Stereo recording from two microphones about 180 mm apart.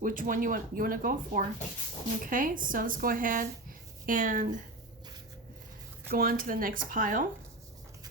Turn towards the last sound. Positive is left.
turn(degrees=-50)  # may be behind; listen again after turning